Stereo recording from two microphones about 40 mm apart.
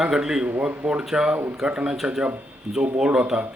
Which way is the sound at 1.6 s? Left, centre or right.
Right.